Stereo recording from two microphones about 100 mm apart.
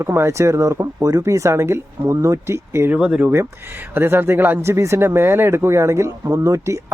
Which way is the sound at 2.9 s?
15° right (ahead or behind).